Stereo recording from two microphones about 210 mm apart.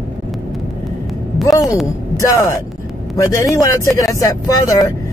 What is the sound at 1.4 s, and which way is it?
Speech, 15° left (ahead or behind).